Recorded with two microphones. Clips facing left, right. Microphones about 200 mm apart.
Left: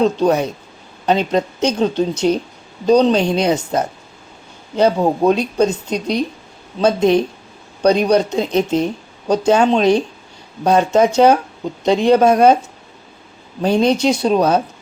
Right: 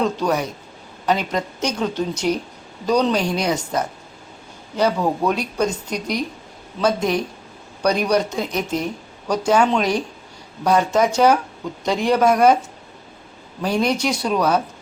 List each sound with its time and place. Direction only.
0.0 s a woman's voice: 25° left (ahead or behind)
13.6 s speech: 25° left (ahead or behind)